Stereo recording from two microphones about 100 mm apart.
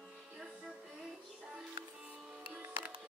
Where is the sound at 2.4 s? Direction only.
15° right (ahead or behind).